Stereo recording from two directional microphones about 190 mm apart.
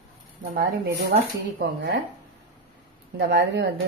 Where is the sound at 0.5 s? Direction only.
60° right (ahead or behind).